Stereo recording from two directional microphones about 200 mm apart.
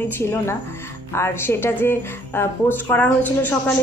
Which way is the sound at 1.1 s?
10° left (ahead or behind).